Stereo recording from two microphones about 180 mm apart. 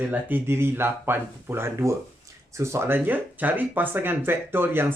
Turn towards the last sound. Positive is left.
turn(degrees=-10)  # may be behind; listen again after turning